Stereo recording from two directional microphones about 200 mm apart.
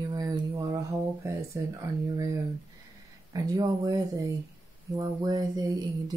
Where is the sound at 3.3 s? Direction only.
15° right (ahead or behind).